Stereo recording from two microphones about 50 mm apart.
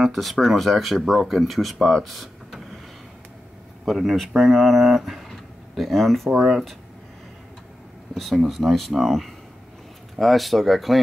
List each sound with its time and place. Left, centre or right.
0.0 s speech: centre
1.9 s vehicle: centre
3.9 s speech: centre
5.3 s a sound: centre
6.3 s speech: centre
8.1 s speech: centre